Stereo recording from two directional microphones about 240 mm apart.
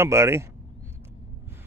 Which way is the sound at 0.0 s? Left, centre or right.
Centre.